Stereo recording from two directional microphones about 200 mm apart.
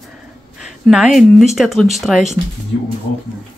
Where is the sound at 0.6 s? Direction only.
Centre (ahead or behind).